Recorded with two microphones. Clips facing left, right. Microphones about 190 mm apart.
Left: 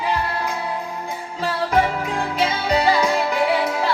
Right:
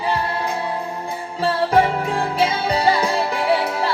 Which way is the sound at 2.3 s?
30° right (ahead or behind).